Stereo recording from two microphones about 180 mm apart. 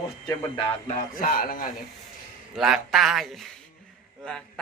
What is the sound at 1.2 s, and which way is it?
Speech, 50° left (ahead or behind).